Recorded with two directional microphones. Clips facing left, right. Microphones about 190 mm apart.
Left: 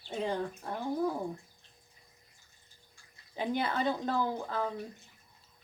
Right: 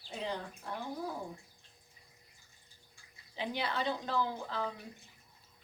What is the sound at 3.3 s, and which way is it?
Speech, 50° left (ahead or behind).